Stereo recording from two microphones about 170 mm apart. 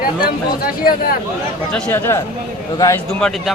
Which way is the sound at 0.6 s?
60° left (ahead or behind).